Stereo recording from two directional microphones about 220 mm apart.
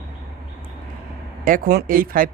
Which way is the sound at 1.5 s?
40° right (ahead or behind).